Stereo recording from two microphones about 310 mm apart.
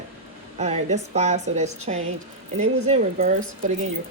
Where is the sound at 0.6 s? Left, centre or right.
Right.